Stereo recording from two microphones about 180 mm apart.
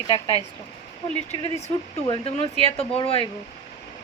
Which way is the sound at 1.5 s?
15° left (ahead or behind).